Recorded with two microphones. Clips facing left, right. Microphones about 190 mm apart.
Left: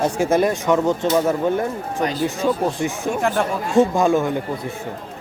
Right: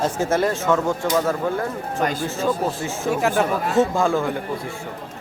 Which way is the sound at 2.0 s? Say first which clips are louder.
Left 2 dB; 50° right (ahead or behind).